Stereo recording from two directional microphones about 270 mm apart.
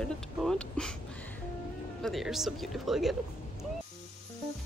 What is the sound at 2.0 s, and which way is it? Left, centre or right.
A woman's voice, centre.